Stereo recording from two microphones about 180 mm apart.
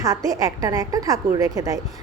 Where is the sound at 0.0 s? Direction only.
20° right (ahead or behind).